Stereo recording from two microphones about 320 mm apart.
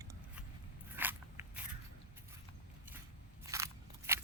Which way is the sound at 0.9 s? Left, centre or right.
Centre.